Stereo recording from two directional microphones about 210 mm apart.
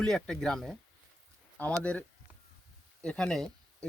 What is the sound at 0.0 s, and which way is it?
Speech, centre (ahead or behind).